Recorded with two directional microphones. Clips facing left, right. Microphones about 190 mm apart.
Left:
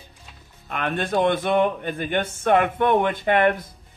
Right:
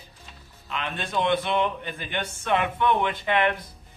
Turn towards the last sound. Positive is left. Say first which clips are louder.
# left 5 dB
turn(degrees=50)  # may be behind; listen again after turning